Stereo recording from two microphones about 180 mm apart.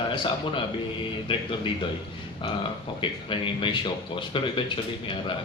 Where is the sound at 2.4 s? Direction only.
30° left (ahead or behind).